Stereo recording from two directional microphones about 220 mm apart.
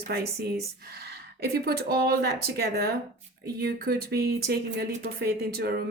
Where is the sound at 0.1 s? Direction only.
45° right (ahead or behind).